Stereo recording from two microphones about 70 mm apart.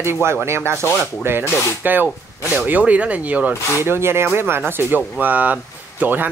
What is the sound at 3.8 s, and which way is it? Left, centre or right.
Speech, right.